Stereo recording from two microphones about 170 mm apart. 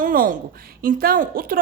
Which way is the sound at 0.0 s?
55° right (ahead or behind).